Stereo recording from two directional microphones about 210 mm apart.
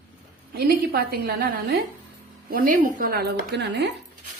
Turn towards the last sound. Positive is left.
turn(degrees=-50)  # may be behind; listen again after turning